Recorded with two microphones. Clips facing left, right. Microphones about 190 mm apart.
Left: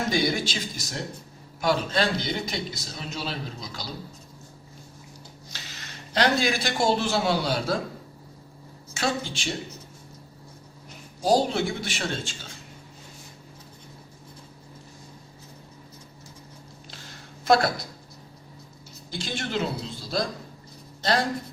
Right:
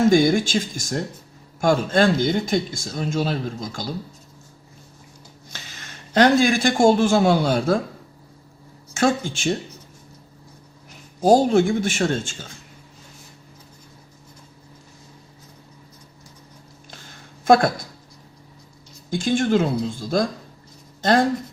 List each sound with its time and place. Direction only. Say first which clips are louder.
0.0 s speech: right 9 dB; 50° right (ahead or behind)
6.1 s speech: right 8 dB; 50° right (ahead or behind)
8.9 s speech: right 8 dB; 50° right (ahead or behind)
11.2 s speech: right 7 dB; 50° right (ahead or behind)
17.4 s speech: right 5 dB; 50° right (ahead or behind)
19.1 s speech: right 11 dB; 50° right (ahead or behind)